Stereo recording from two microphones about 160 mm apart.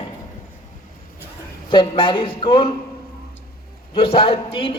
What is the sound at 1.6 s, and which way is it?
Speech, 30° left (ahead or behind).